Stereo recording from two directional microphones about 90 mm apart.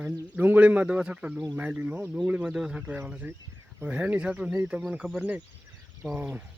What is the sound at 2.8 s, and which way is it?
Speech, 20° right (ahead or behind).